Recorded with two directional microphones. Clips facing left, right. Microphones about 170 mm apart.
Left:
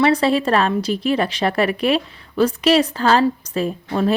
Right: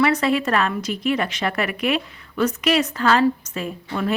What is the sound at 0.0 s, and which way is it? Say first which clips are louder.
A woman's voice: left 3 dB; 30° left (ahead or behind).